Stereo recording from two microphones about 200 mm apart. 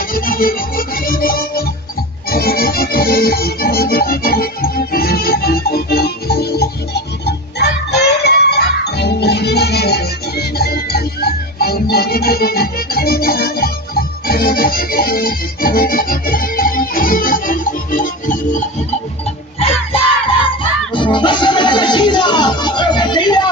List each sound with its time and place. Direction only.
0.1 s music: 45° left (ahead or behind)
20.9 s music: 25° left (ahead or behind)